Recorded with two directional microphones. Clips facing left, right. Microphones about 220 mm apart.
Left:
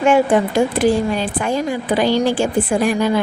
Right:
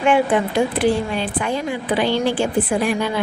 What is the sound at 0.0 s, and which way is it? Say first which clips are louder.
Speech: left 3 dB; 45° left (ahead or behind).